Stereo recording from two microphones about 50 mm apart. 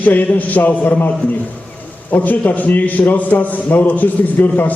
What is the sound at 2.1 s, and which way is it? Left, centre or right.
A man's voice, left.